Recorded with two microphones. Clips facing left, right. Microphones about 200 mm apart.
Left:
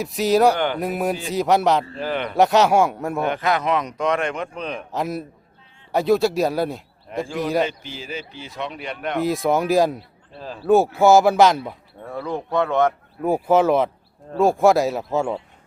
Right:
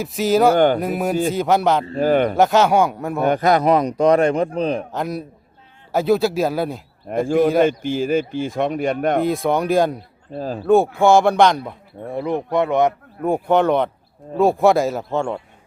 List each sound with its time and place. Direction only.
0.0 s speech: centre (ahead or behind)
0.5 s speech: 45° right (ahead or behind)
0.8 s speech: centre (ahead or behind)
2.0 s speech: 45° right (ahead or behind)
2.3 s speech: centre (ahead or behind)
3.2 s a man's voice: 40° right (ahead or behind)
4.9 s speech: centre (ahead or behind)
7.1 s speech: 50° right (ahead or behind)
9.2 s speech: centre (ahead or behind)
10.3 s speech: 45° right (ahead or behind)
10.7 s speech: 5° left (ahead or behind)
12.0 s speech: 20° right (ahead or behind)
13.2 s speech: 5° left (ahead or behind)